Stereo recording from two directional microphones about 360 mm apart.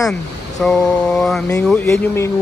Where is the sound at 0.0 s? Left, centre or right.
Centre.